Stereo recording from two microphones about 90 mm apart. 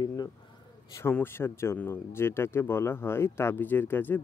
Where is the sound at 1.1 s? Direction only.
25° left (ahead or behind).